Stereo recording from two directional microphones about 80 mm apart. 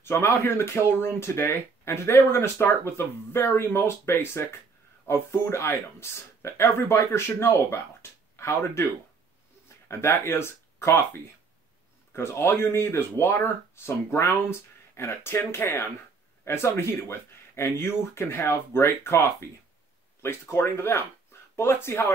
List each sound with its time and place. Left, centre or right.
0.0 s speech: left
9.8 s speech: left
12.1 s speech: left